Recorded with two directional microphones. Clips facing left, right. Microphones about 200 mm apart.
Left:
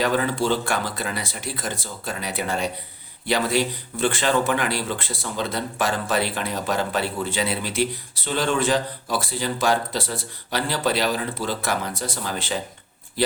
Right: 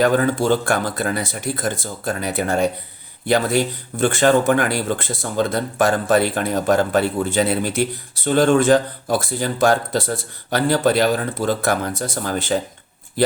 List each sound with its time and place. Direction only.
0.0 s speech: 45° right (ahead or behind)